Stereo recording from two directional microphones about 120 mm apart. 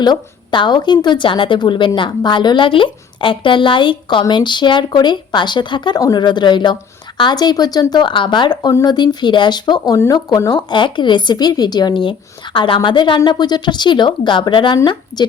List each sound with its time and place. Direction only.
0.0 s a woman's voice: 40° left (ahead or behind)